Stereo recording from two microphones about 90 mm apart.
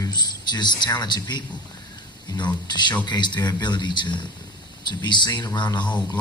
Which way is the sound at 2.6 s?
55° left (ahead or behind).